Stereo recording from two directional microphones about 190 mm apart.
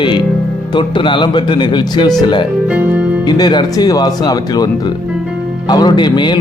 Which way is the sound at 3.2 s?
20° left (ahead or behind).